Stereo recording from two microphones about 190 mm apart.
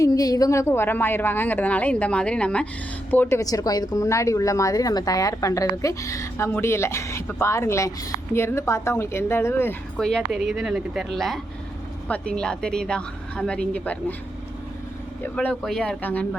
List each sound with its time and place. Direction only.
0.0 s a woman's voice: 20° left (ahead or behind)
15.2 s a woman's voice: 5° left (ahead or behind)